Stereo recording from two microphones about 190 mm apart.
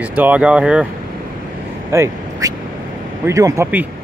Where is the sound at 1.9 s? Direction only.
15° right (ahead or behind).